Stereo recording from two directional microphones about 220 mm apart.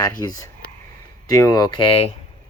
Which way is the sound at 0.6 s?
40° right (ahead or behind).